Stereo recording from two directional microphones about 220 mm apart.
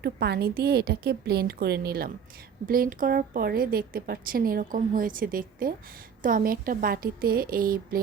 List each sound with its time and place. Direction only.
0.0 s a woman's voice: 45° right (ahead or behind)